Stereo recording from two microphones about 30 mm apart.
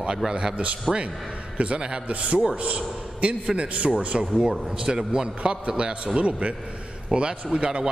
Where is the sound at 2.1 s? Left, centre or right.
Right.